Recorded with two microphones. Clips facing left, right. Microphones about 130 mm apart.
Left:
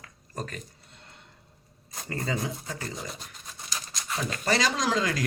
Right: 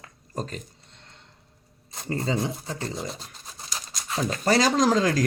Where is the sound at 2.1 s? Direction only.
25° right (ahead or behind).